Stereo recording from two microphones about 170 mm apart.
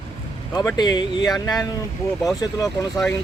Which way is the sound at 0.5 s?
25° left (ahead or behind).